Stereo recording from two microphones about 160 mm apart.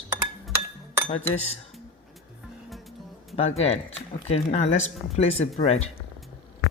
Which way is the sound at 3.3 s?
40° left (ahead or behind).